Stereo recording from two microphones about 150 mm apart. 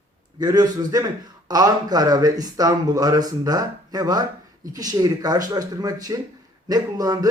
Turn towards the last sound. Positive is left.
turn(degrees=-25)  # may be behind; listen again after turning